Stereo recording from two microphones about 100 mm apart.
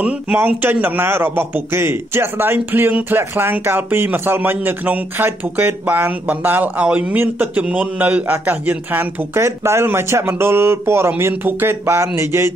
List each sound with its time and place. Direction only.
0.6 s a man's voice: 20° right (ahead or behind)